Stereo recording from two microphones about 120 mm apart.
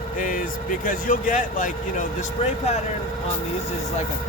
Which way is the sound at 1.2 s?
90° left.